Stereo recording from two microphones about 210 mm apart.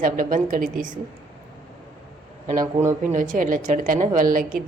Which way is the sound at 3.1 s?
40° right (ahead or behind).